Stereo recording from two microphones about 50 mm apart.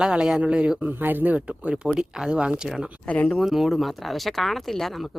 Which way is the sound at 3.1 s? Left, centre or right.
Left.